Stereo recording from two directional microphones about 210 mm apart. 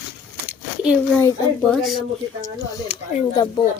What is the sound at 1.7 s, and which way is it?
Speech, centre (ahead or behind).